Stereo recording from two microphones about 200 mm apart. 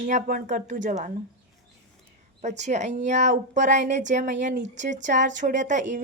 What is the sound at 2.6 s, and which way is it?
A woman's voice, 35° right (ahead or behind).